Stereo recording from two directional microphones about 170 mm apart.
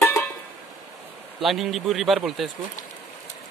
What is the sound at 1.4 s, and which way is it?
Speech, centre (ahead or behind).